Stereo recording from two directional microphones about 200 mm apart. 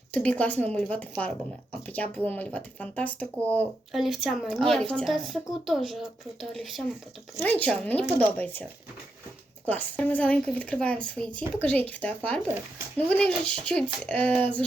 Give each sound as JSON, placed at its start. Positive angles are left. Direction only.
{"t": 0.1, "sound": "speech", "side_deg": 5}
{"t": 9.6, "sound": "speech", "side_deg": 10}